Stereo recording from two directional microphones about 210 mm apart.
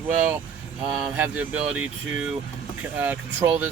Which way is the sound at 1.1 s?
10° right (ahead or behind).